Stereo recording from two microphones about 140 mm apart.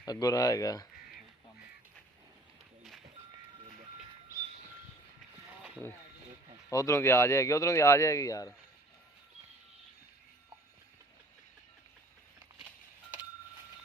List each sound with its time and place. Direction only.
0.0 s speech: 25° left (ahead or behind)
6.7 s speech: 20° left (ahead or behind)